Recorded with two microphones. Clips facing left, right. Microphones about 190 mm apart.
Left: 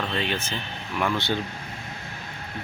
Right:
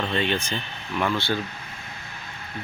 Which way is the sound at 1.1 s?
20° left (ahead or behind).